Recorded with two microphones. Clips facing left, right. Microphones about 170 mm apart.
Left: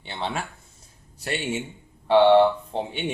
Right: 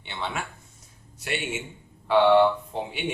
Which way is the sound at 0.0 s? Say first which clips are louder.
Left 2 dB; 35° left (ahead or behind).